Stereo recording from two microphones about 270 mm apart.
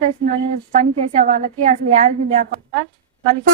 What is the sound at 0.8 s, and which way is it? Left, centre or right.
A woman's voice, right.